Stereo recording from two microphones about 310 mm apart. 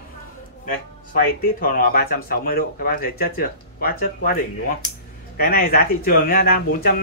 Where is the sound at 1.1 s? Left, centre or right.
Left.